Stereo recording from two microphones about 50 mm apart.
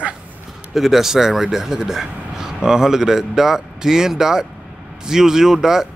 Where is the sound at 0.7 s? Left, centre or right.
Centre.